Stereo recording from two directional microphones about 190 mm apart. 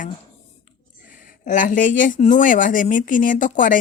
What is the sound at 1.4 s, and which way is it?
Speech, 45° left (ahead or behind).